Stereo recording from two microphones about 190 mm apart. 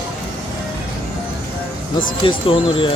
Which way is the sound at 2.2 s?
30° left (ahead or behind).